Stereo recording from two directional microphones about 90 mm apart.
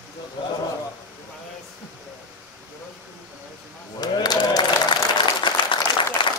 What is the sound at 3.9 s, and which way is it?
Applause, 50° left (ahead or behind).